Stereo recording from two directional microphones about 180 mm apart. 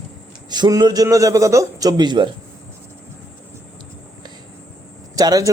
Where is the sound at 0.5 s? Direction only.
25° right (ahead or behind).